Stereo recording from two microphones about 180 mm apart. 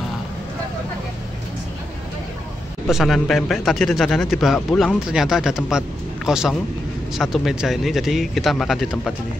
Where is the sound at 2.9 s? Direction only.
Centre (ahead or behind).